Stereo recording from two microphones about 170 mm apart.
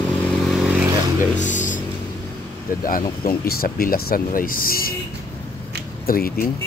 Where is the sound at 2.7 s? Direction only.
60° left (ahead or behind).